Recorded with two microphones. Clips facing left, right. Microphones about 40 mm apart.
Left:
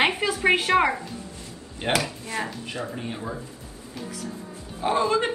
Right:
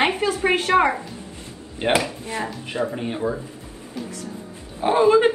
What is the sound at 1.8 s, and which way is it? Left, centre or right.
Speech, right.